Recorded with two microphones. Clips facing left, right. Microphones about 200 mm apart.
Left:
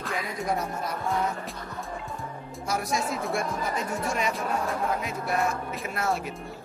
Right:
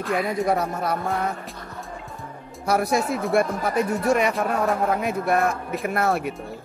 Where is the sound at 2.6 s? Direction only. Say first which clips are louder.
Right 7 dB; 60° right (ahead or behind).